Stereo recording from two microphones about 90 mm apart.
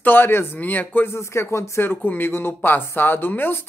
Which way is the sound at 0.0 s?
25° left (ahead or behind).